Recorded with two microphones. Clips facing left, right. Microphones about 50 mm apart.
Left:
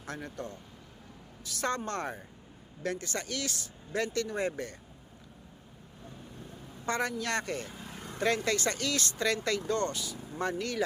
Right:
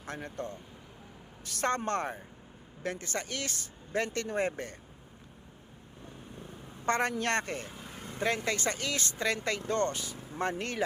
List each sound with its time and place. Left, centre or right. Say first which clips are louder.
0.0 s speech: right 1 dB; right
1.5 s speech: right 2 dB; right
6.8 s a man's voice: right 3 dB; right
7.8 s vehicle: left 1 dB; centre
8.0 s speech: left 2 dB; right